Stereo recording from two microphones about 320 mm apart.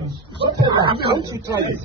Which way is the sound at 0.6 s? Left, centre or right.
Centre.